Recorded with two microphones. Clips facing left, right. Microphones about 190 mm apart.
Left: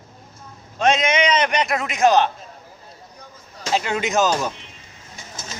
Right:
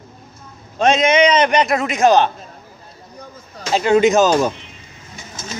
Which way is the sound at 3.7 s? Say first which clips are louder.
Right 8 dB; 30° right (ahead or behind).